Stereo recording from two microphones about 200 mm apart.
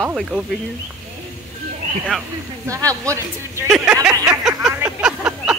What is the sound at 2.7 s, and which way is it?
Speech, 15° right (ahead or behind).